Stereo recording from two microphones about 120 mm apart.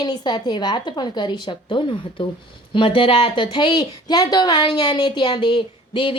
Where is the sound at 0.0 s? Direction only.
35° left (ahead or behind).